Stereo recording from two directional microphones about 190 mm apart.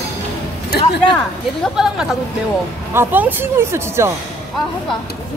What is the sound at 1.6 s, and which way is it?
Speech, 5° right (ahead or behind).